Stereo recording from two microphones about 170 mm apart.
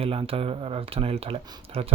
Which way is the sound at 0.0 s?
35° right (ahead or behind).